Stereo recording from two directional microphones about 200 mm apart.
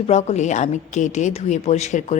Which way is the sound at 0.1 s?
35° left (ahead or behind).